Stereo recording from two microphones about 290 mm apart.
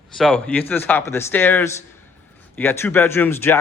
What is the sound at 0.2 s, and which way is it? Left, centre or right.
Speech, centre.